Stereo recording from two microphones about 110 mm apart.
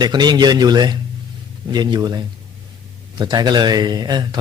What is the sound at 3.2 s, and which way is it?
A man's voice, 40° right (ahead or behind).